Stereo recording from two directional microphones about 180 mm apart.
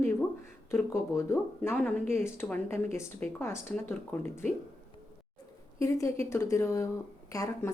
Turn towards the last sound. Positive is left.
turn(degrees=15)  # may be behind; listen again after turning